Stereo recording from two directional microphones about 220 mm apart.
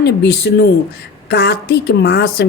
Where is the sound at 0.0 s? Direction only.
50° left (ahead or behind).